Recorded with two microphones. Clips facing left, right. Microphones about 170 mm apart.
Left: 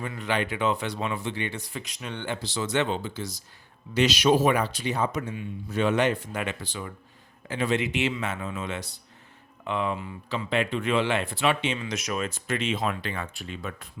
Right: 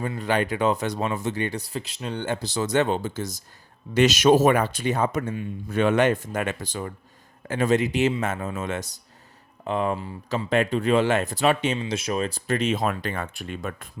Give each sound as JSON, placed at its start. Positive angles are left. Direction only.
{"t": 0.0, "sound": "speech", "side_deg": -35}
{"t": 11.8, "sound": "speech", "side_deg": -30}